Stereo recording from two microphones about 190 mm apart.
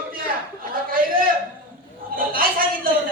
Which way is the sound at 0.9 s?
50° right (ahead or behind).